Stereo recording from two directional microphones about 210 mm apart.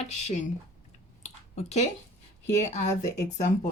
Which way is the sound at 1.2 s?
30° left (ahead or behind).